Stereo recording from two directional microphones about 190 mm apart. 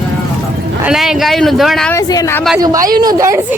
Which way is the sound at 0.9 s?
Centre (ahead or behind).